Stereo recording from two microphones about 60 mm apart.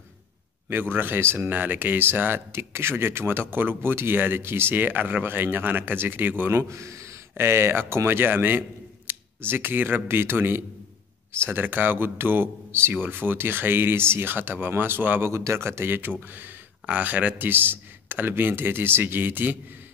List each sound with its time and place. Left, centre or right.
0.7 s speech: right
1.5 s speech: right
6.5 s speech: right
15.3 s speech: right